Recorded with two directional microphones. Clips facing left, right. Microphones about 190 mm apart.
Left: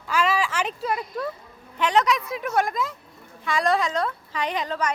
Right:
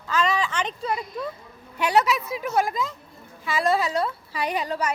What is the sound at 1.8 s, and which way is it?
A woman's voice, 10° right (ahead or behind).